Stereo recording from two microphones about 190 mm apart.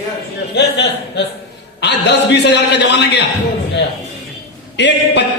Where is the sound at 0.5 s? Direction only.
65° left (ahead or behind).